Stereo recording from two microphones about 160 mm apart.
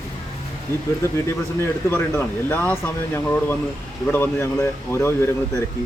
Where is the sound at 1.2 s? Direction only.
15° left (ahead or behind).